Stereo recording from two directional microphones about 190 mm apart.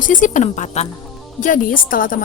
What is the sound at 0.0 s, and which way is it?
Speech, 45° left (ahead or behind).